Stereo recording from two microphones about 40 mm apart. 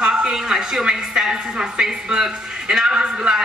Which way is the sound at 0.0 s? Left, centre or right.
Right.